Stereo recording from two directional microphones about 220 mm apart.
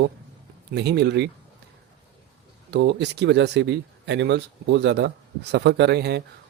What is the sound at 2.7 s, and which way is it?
Speech, 50° right (ahead or behind).